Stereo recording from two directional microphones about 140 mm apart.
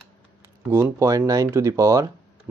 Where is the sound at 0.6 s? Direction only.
20° right (ahead or behind).